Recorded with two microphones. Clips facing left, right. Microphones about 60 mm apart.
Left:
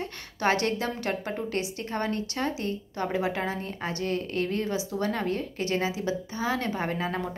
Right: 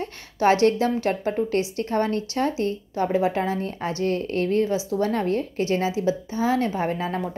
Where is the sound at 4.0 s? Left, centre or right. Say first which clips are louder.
Right 5 dB; right.